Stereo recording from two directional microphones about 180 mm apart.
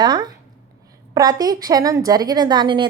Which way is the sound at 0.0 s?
25° right (ahead or behind).